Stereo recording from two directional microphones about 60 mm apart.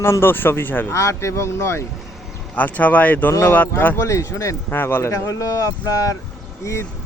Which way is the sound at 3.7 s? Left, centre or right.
Left.